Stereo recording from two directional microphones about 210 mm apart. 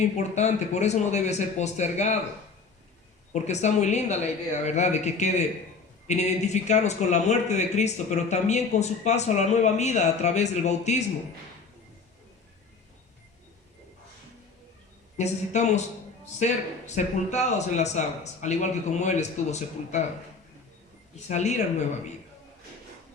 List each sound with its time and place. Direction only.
0.2 s speech: 35° left (ahead or behind)
3.3 s speech: 35° left (ahead or behind)
15.2 s speech: 35° left (ahead or behind)
21.2 s speech: 35° left (ahead or behind)